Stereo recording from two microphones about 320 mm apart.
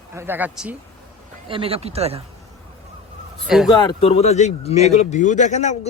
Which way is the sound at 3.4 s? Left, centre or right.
Centre.